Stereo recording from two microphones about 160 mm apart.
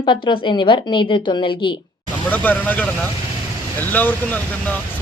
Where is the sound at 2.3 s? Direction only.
10° left (ahead or behind).